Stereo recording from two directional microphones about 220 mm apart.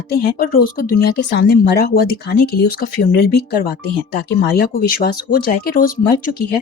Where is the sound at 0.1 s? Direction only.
40° left (ahead or behind).